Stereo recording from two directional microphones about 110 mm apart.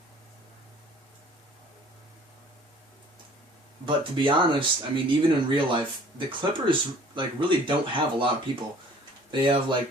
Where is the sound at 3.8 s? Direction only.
50° right (ahead or behind).